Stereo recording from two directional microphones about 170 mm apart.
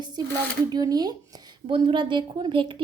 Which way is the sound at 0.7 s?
25° right (ahead or behind).